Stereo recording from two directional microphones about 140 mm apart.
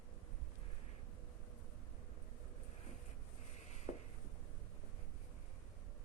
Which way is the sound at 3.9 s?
25° right (ahead or behind).